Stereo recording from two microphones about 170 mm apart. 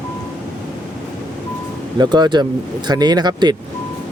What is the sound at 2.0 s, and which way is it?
Speech, 25° right (ahead or behind).